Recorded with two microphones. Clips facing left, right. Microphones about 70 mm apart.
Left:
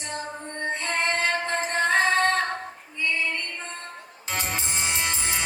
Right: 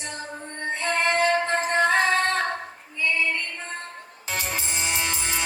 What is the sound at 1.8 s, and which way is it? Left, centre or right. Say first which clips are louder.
Female singing: left 1 dB; left.